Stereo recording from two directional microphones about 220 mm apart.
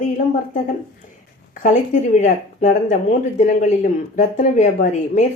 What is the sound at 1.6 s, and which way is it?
Speech, 35° left (ahead or behind).